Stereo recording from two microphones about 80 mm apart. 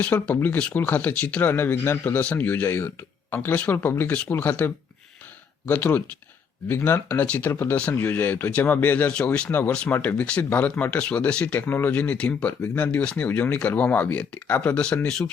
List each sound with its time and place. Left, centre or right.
0.0 s speech: centre
7.8 s speech: centre